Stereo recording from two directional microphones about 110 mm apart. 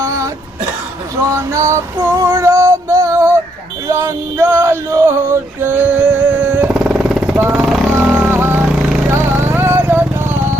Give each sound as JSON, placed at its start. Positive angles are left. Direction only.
{"t": 0.0, "sound": "throat clearing", "side_deg": -30}
{"t": 1.2, "sound": "female singing", "side_deg": -25}
{"t": 3.8, "sound": "male singing", "side_deg": -25}
{"t": 6.7, "sound": "jackhammer", "side_deg": -5}
{"t": 7.5, "sound": "vehicle", "side_deg": -5}
{"t": 7.9, "sound": "a sound", "side_deg": -20}
{"t": 9.0, "sound": "music", "side_deg": -20}